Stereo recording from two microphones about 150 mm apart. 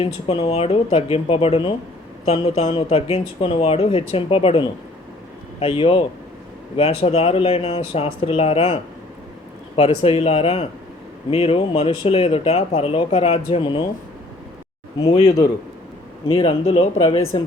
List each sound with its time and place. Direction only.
0.0 s speech: 40° left (ahead or behind)
15.0 s speech: 45° left (ahead or behind)
16.3 s speech: 40° left (ahead or behind)